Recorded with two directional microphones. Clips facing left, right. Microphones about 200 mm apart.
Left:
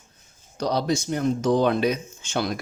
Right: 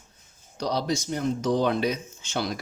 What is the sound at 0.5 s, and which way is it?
Speech, 55° left (ahead or behind).